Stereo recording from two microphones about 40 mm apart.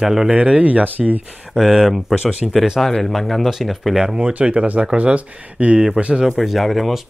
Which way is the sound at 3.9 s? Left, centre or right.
Centre.